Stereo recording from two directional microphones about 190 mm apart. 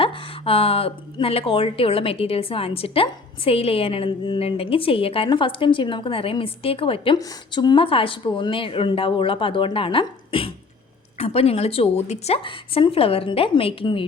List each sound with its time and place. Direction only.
0.0 s a woman's voice: 30° left (ahead or behind)